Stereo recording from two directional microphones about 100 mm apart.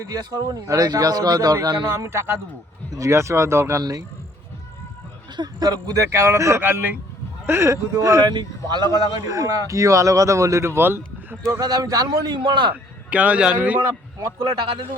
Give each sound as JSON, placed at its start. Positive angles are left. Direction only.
{"t": 0.0, "sound": "speech", "side_deg": -40}
{"t": 2.0, "sound": "speech", "side_deg": -25}
{"t": 5.4, "sound": "speech", "side_deg": -40}
{"t": 8.3, "sound": "speech", "side_deg": -45}
{"t": 9.2, "sound": "speech", "side_deg": -35}
{"t": 11.4, "sound": "speech", "side_deg": -35}
{"t": 12.4, "sound": "speech", "side_deg": -50}
{"t": 12.7, "sound": "a man's voice", "side_deg": -15}